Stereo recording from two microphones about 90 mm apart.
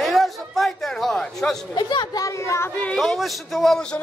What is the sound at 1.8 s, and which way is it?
Speech, 60° left (ahead or behind).